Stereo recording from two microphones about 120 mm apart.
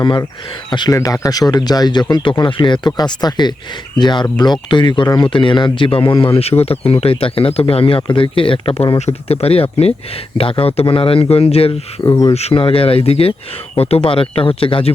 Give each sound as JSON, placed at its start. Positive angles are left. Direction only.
{"t": 0.0, "sound": "speech", "side_deg": 35}
{"t": 0.9, "sound": "speech", "side_deg": 30}
{"t": 6.2, "sound": "speech", "side_deg": 55}
{"t": 12.0, "sound": "speech", "side_deg": 30}
{"t": 12.3, "sound": "speech", "side_deg": 60}